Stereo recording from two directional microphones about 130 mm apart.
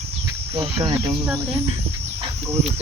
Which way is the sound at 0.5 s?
35° right (ahead or behind).